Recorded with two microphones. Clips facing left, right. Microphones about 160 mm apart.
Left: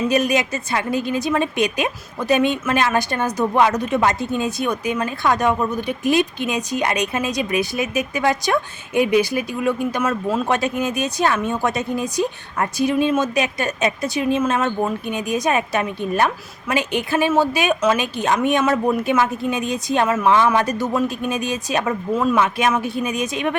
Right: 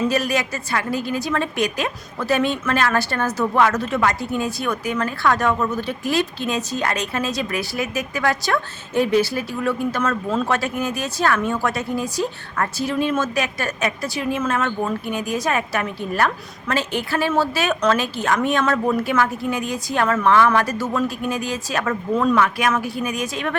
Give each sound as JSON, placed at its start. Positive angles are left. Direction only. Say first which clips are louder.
{"t": 0.1, "sound": "a woman's voice", "louder": "left 3 dB", "side_deg": 20}